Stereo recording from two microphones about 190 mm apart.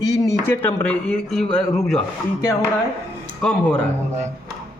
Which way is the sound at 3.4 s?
5° left (ahead or behind).